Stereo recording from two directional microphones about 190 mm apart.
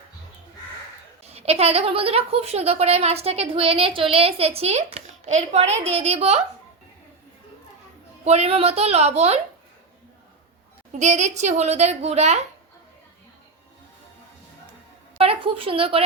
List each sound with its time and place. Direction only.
1.2 s a woman's voice: 35° right (ahead or behind)
8.2 s a woman's voice: 35° right (ahead or behind)
11.0 s a woman's voice: 40° right (ahead or behind)
15.2 s a woman's voice: 30° right (ahead or behind)